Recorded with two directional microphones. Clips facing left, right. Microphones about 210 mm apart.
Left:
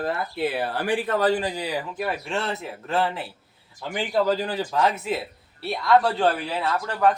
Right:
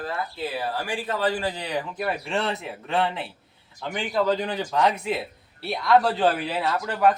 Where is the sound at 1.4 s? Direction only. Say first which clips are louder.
Even; 10° left (ahead or behind).